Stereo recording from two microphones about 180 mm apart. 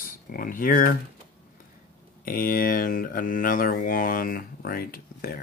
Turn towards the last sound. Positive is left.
turn(degrees=55)  # may be behind; listen again after turning